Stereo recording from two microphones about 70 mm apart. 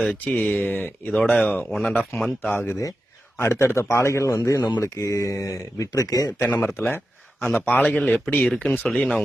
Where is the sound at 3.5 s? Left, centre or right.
Left.